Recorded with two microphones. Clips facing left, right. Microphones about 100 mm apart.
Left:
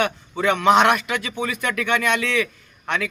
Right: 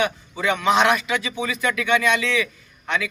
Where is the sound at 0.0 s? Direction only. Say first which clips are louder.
Left 2 dB; 55° left (ahead or behind).